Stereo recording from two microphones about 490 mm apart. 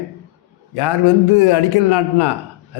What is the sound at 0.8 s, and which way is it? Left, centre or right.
A man's voice, left.